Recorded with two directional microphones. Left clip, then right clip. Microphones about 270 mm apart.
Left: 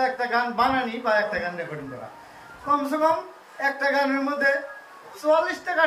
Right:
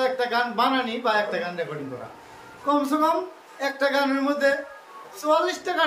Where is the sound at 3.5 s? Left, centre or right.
Centre.